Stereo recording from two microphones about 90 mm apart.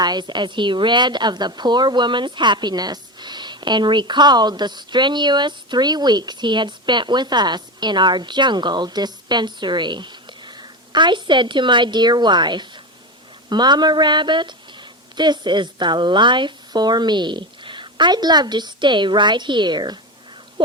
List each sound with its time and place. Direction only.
0.0 s a woman's voice: 55° right (ahead or behind)